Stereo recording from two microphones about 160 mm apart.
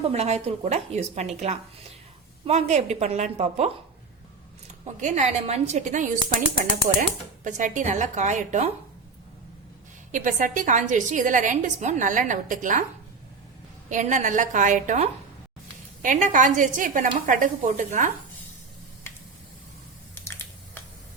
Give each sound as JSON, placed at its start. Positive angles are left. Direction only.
{"t": 0.1, "sound": "a woman's voice", "side_deg": -40}
{"t": 4.9, "sound": "a woman's voice", "side_deg": -50}
{"t": 7.4, "sound": "a woman's voice", "side_deg": -50}
{"t": 10.1, "sound": "a woman's voice", "side_deg": -55}
{"t": 13.9, "sound": "a woman's voice", "side_deg": -50}
{"t": 20.2, "sound": "a sound", "side_deg": 15}